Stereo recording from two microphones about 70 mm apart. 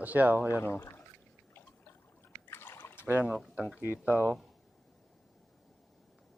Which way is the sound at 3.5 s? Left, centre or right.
Centre.